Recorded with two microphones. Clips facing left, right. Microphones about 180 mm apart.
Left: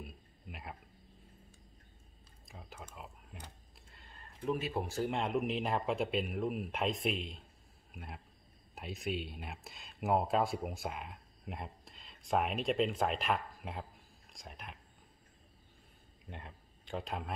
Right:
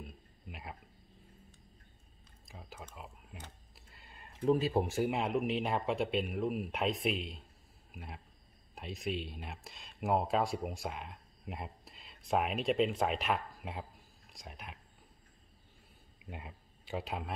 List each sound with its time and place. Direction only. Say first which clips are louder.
0.0 s a sound: even; centre (ahead or behind)
2.4 s a sound: right 1 dB; centre (ahead or behind)
4.5 s speech: right 6 dB; 30° right (ahead or behind)
4.8 s speech: right 3 dB; 15° right (ahead or behind)
5.1 s a man's voice: right 1 dB; centre (ahead or behind)
16.3 s speech: right 2 dB; 5° right (ahead or behind)